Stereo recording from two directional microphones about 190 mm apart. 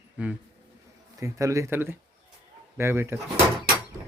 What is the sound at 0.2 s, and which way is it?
Speech, 5° right (ahead or behind).